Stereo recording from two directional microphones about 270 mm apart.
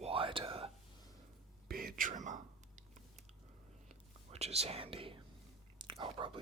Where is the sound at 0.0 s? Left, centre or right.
Centre.